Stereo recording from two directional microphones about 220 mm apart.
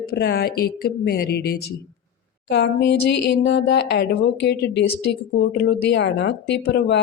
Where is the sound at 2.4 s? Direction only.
50° left (ahead or behind).